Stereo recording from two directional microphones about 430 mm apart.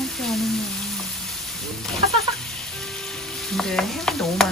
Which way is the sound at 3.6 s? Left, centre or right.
Centre.